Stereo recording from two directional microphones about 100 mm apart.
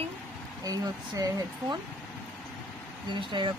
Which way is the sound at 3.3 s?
45° right (ahead or behind).